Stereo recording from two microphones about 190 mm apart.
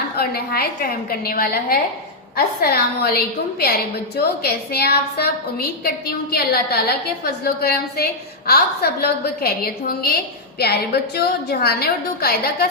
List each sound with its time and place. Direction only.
0.2 s a woman's voice: 55° left (ahead or behind)